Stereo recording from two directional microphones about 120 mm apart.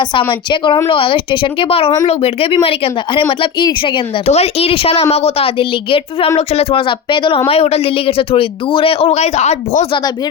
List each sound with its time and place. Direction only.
0.0 s speech: 40° left (ahead or behind)
4.3 s a woman's voice: 60° left (ahead or behind)
6.3 s a woman's voice: 60° left (ahead or behind)